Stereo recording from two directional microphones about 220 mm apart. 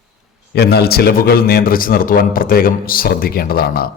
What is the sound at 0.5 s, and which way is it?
A man's voice, 45° left (ahead or behind).